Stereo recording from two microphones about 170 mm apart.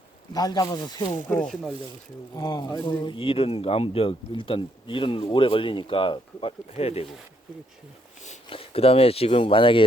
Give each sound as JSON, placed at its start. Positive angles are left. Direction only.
{"t": 0.3, "sound": "speech", "side_deg": 20}
{"t": 1.3, "sound": "speech", "side_deg": 5}
{"t": 2.3, "sound": "speech", "side_deg": 25}
{"t": 8.2, "sound": "speech", "side_deg": 40}